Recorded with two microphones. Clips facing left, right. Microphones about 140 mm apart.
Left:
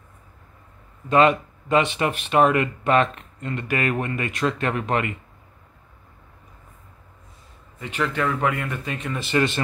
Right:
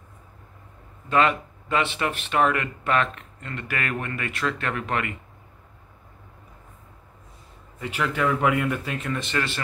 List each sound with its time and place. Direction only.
1.1 s speech: 20° left (ahead or behind)
7.8 s speech: 5° right (ahead or behind)
9.2 s speech: 15° left (ahead or behind)